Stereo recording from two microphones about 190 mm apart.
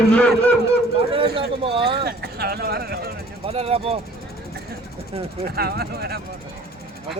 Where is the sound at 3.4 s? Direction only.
30° right (ahead or behind).